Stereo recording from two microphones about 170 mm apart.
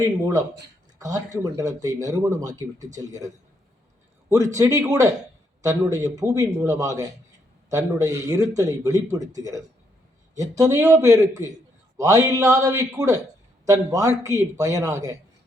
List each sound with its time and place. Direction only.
0.0 s a man's voice: 20° right (ahead or behind)
4.5 s a man's voice: 20° right (ahead or behind)